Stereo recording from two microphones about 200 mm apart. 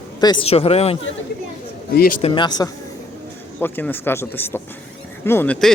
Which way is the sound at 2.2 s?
25° left (ahead or behind).